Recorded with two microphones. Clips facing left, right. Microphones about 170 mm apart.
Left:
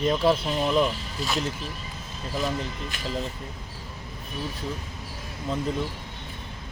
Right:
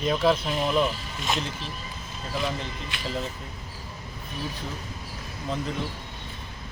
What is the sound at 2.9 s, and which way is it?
Speech, 45° left (ahead or behind).